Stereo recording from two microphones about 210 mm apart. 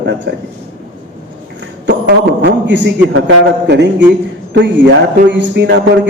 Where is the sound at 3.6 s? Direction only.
55° right (ahead or behind).